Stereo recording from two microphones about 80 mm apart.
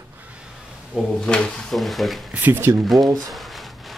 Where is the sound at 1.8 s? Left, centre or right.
Centre.